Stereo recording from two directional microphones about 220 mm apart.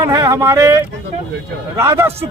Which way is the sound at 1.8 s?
10° right (ahead or behind).